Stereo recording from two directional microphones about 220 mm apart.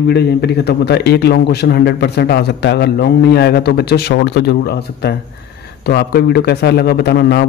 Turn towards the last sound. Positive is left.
turn(degrees=50)  # may be behind; listen again after turning